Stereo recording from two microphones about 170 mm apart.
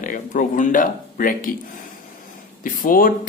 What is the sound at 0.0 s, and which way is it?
Speech, 50° left (ahead or behind).